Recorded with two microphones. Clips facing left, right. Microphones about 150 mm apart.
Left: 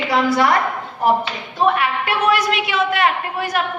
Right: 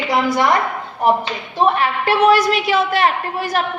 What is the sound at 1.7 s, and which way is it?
A woman's voice, 35° right (ahead or behind).